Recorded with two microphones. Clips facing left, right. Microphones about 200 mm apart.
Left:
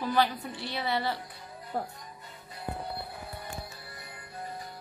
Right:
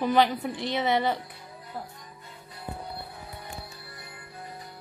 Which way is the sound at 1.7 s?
50° left (ahead or behind).